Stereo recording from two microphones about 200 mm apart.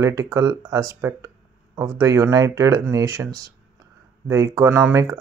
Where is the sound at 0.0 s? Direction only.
15° right (ahead or behind).